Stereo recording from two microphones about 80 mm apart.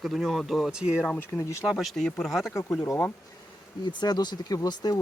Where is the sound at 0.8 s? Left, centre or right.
Centre.